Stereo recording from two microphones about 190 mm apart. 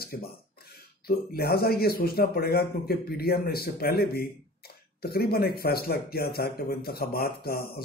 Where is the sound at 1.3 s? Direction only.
55° left (ahead or behind).